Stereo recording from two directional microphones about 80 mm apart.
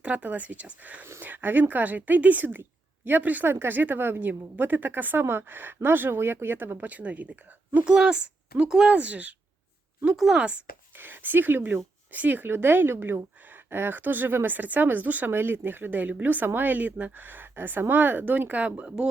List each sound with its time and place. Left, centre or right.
0.0 s a woman's voice: centre
10.9 s a woman's voice: right